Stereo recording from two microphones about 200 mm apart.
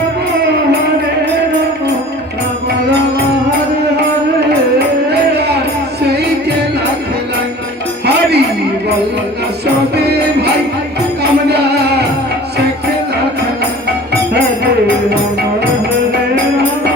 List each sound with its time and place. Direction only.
5.3 s music: 55° right (ahead or behind)
8.0 s music: 55° right (ahead or behind)
11.2 s music: 55° right (ahead or behind)